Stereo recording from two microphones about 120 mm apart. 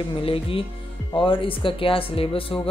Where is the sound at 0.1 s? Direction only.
50° left (ahead or behind).